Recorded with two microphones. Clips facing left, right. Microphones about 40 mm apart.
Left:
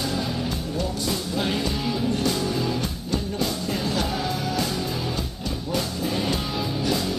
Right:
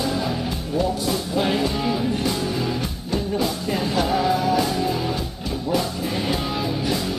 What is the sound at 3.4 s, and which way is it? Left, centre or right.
Music, centre.